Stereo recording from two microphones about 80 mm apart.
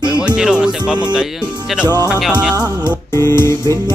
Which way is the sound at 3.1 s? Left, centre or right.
Left.